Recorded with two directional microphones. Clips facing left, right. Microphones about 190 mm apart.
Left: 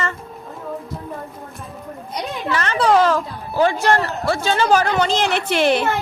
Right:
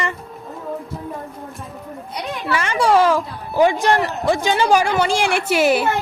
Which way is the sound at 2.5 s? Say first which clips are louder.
Even; 10° right (ahead or behind).